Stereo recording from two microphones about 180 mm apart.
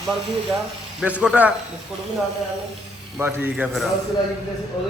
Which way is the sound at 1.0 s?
5° right (ahead or behind).